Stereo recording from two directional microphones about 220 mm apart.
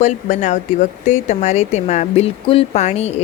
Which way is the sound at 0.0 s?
30° left (ahead or behind).